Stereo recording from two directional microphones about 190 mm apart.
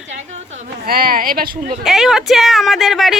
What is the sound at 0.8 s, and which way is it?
Speech, 50° right (ahead or behind).